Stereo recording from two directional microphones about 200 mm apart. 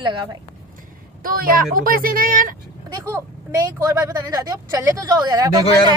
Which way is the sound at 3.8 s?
15° right (ahead or behind).